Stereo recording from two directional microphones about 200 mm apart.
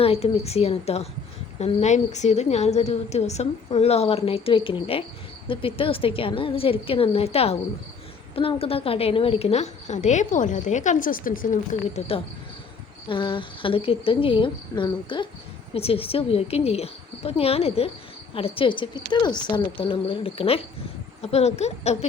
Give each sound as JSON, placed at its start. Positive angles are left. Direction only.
{"t": 0.0, "sound": "a woman's voice", "side_deg": 30}